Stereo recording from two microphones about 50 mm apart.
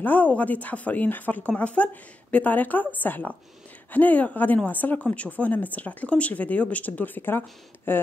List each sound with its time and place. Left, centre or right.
0.0 s speech: left